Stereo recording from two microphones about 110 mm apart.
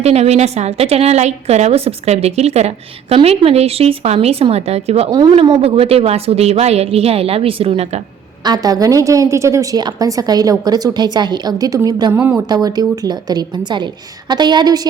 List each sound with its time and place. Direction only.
0.0 s a woman's voice: 75° right (ahead or behind)
5.1 s a woman's voice: 40° right (ahead or behind)
5.6 s a woman's voice: 65° right (ahead or behind)
8.4 s a woman's voice: 35° right (ahead or behind)